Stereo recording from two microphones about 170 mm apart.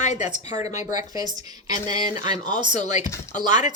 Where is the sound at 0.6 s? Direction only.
20° right (ahead or behind).